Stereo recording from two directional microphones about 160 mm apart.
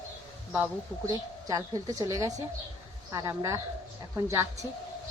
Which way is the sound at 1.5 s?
20° right (ahead or behind).